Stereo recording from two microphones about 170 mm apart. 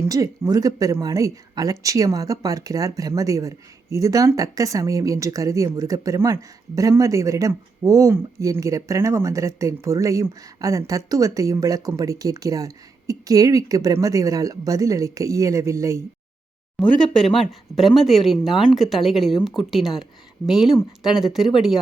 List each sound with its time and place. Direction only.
0.0 s speech: 20° right (ahead or behind)
16.8 s speech: centre (ahead or behind)